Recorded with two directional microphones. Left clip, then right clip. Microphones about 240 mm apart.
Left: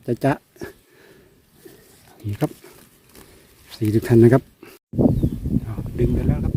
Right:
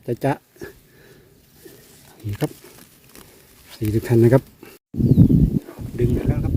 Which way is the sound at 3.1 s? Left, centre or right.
Right.